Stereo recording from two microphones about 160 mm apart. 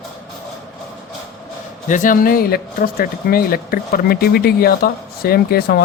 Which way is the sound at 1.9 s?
55° left (ahead or behind).